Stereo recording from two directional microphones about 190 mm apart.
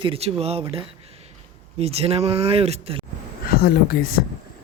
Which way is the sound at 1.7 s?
30° right (ahead or behind).